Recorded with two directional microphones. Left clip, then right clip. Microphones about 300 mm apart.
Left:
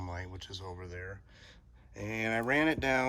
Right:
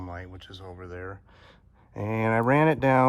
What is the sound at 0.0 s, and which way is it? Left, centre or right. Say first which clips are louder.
Speech: right 3 dB; centre.